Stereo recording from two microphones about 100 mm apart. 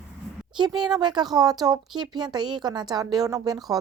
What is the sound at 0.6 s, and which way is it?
A woman's voice, 45° right (ahead or behind).